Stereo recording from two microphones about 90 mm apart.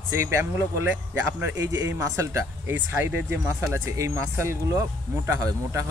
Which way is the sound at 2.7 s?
20° right (ahead or behind).